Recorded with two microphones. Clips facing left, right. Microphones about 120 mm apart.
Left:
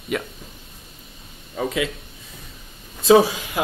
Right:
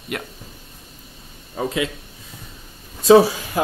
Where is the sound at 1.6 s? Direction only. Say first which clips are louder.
Right 1 dB; 30° right (ahead or behind).